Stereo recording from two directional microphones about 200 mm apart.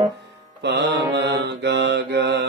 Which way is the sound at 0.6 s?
60° right (ahead or behind).